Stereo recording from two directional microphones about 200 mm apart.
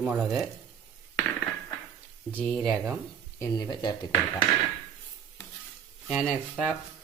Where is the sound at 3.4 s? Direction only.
20° left (ahead or behind).